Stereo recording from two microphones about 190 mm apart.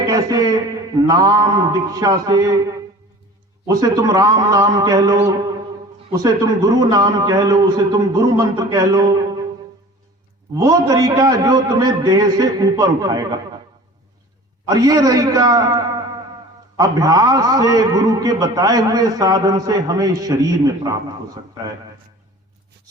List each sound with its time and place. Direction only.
0.0 s a man's voice: 20° right (ahead or behind)
10.6 s a man's voice: 20° right (ahead or behind)
14.7 s a man's voice: 20° right (ahead or behind)